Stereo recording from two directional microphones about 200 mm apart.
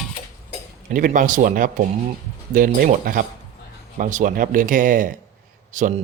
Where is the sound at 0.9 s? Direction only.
40° right (ahead or behind).